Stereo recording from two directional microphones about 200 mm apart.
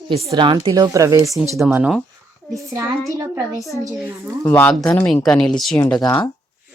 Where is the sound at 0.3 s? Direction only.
25° right (ahead or behind); by 2.0 s 5° right (ahead or behind).